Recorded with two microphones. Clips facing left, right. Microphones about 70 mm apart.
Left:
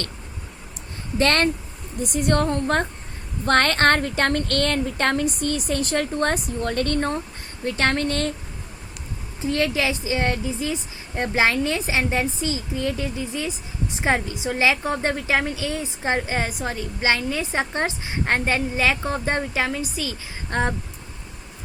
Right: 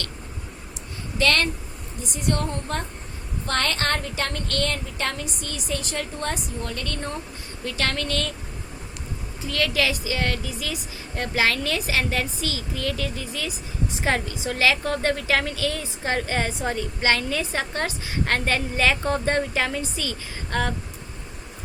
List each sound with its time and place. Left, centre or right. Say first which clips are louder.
1.2 s speech: left 2 dB; left
2.0 s speech: left 5 dB; left
9.4 s a woman's voice: left 2 dB; left
16.4 s a woman's voice: right 1 dB; centre
20.5 s a woman's voice: left 2 dB; left